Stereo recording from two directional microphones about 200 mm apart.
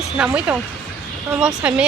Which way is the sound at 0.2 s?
5° right (ahead or behind).